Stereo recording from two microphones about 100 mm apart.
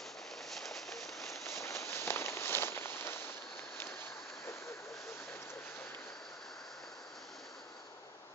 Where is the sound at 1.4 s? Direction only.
30° left (ahead or behind).